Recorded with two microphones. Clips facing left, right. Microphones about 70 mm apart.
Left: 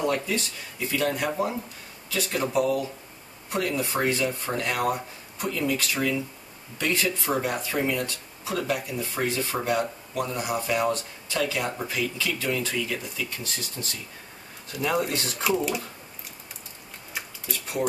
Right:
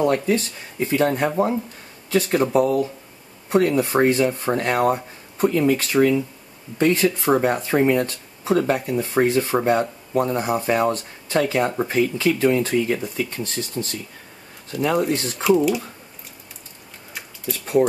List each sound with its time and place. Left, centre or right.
0.0 s speech: right
15.1 s speech: right
15.4 s speech: centre
17.5 s speech: right